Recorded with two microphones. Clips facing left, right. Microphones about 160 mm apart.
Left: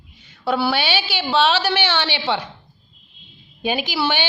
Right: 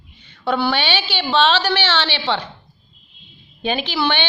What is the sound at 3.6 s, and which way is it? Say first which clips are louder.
Speech: right 1 dB; 10° left (ahead or behind).